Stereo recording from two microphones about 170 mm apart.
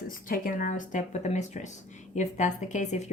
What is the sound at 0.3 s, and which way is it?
A woman's voice, 55° left (ahead or behind).